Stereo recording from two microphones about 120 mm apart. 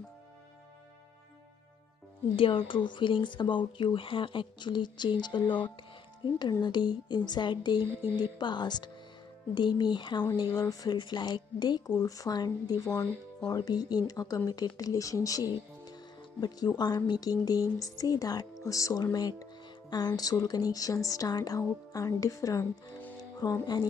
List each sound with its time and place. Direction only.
2.3 s speech: 45° left (ahead or behind)